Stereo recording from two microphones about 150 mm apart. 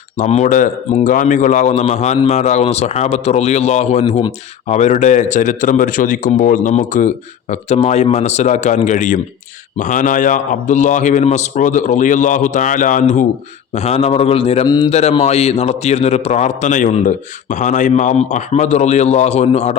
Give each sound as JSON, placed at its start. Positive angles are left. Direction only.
{"t": 0.2, "sound": "a man's voice", "side_deg": 50}
{"t": 13.7, "sound": "a man's voice", "side_deg": 45}